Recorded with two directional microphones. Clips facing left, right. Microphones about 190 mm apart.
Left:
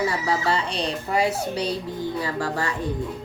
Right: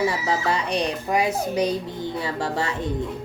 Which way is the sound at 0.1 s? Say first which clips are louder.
Even; 20° right (ahead or behind).